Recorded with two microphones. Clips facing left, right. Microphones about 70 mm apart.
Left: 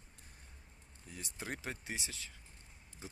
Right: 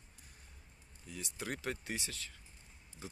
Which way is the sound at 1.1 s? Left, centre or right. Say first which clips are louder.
Right 2 dB; left.